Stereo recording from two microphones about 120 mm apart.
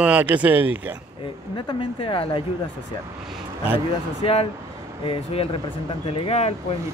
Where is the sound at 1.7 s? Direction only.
45° left (ahead or behind).